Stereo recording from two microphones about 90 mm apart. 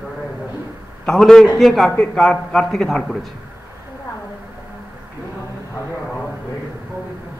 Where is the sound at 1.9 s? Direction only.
15° left (ahead or behind).